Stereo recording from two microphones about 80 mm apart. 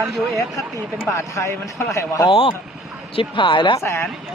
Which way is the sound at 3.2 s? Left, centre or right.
Left.